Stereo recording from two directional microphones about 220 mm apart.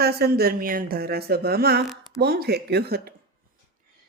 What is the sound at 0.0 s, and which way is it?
Speech, 45° right (ahead or behind).